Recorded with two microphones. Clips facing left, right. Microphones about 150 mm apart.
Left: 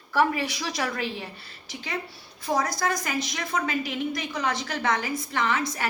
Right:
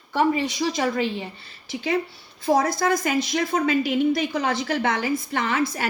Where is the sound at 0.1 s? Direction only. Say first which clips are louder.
Right 3 dB; 25° right (ahead or behind).